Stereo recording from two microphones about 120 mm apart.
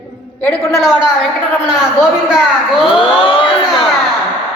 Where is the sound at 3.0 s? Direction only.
45° left (ahead or behind).